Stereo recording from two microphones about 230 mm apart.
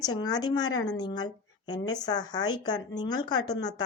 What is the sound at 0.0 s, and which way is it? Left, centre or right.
A woman's voice, centre.